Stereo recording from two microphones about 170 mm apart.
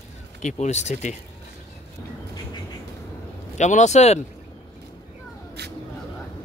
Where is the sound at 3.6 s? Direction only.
45° left (ahead or behind).